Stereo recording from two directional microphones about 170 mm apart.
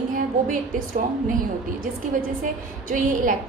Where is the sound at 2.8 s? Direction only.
50° right (ahead or behind).